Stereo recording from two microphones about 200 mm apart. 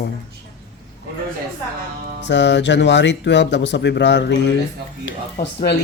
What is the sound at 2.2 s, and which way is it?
Speech, 60° left (ahead or behind).